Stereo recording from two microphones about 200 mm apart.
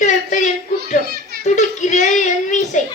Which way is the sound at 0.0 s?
35° left (ahead or behind).